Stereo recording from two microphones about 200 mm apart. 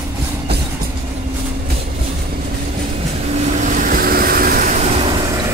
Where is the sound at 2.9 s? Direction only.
30° right (ahead or behind).